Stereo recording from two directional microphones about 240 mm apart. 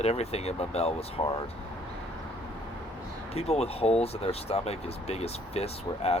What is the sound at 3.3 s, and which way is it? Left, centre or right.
Speech, left.